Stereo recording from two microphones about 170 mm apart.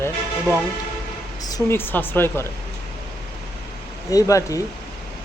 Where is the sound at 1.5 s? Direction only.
20° left (ahead or behind).